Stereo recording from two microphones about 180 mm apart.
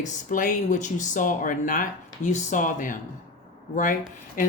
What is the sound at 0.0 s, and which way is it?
Speech, 45° left (ahead or behind).